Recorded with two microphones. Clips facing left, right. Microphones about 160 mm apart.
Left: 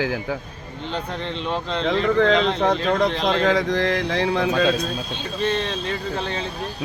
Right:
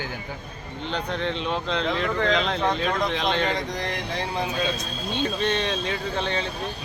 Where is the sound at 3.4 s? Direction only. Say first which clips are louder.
Left 8 dB; 90° left.